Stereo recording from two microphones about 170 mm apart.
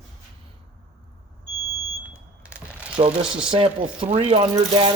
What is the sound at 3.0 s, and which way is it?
Speech, 35° right (ahead or behind).